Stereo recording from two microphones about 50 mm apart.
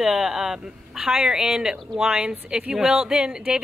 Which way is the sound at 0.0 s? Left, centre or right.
Centre.